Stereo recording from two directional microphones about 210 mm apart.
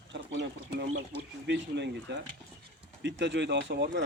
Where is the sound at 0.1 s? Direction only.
55° right (ahead or behind).